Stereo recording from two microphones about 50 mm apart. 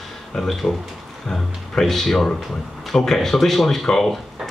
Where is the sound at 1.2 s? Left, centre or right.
Centre.